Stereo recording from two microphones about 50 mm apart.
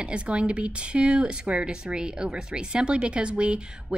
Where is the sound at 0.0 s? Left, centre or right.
Right.